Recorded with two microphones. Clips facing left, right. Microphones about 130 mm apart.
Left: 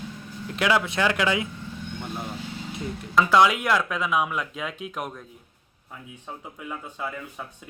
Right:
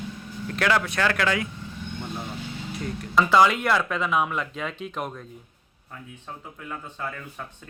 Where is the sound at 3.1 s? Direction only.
Centre (ahead or behind).